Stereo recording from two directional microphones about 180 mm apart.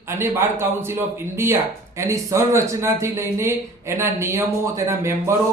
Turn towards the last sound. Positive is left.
turn(degrees=-15)  # may be behind; listen again after turning